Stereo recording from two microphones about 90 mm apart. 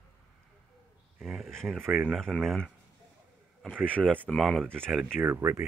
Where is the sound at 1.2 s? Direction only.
Centre (ahead or behind).